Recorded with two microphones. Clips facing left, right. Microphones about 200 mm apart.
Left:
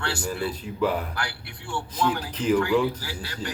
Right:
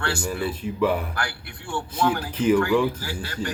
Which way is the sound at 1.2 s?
50° right (ahead or behind).